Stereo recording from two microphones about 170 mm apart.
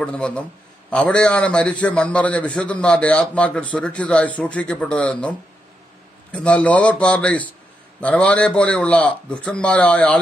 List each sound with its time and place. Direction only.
0.0 s a man's voice: 5° left (ahead or behind)
6.3 s a man's voice: 10° left (ahead or behind)